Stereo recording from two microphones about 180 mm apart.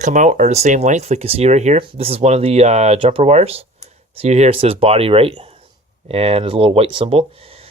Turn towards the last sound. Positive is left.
turn(degrees=-30)  # may be behind; listen again after turning